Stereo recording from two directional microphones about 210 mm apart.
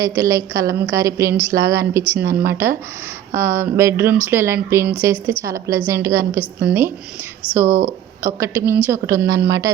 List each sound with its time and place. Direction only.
0.0 s speech: 15° right (ahead or behind)